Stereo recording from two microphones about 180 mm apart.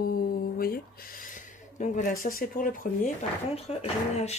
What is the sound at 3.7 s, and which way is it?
Speech, 35° left (ahead or behind).